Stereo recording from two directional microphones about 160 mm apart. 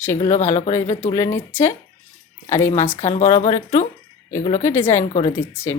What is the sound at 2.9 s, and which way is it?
Speech, 45° left (ahead or behind).